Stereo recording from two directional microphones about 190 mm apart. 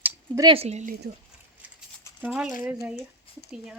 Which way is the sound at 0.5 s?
35° right (ahead or behind).